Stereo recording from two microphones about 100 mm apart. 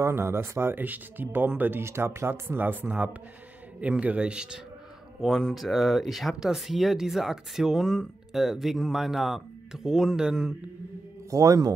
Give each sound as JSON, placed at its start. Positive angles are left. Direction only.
{"t": 0.0, "sound": "a man's voice", "side_deg": -25}
{"t": 11.2, "sound": "a man's voice", "side_deg": -35}